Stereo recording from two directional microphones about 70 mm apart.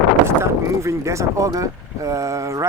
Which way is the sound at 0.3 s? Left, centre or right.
Right.